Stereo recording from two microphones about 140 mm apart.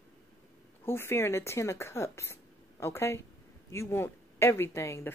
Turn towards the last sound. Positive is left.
turn(degrees=20)  # may be behind; listen again after turning